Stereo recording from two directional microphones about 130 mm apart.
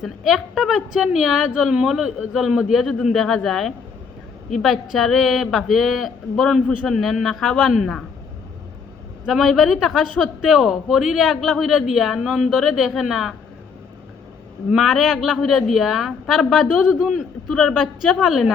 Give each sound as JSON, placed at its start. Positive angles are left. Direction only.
{"t": 0.0, "sound": "a man's voice", "side_deg": -5}
{"t": 9.2, "sound": "a man's voice", "side_deg": 0}
{"t": 14.7, "sound": "a man's voice", "side_deg": 0}